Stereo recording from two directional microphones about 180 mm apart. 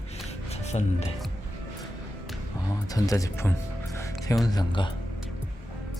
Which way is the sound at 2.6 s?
20° left (ahead or behind).